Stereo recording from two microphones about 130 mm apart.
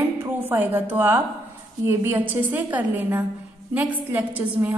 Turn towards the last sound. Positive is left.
turn(degrees=-15)  # may be behind; listen again after turning